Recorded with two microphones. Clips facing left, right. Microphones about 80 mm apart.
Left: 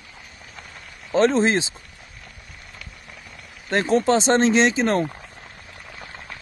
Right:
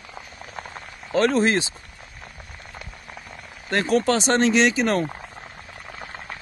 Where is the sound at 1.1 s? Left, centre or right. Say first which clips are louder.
Left 1 dB; left.